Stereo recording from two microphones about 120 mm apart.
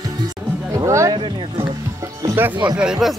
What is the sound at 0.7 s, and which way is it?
Speech, 25° right (ahead or behind).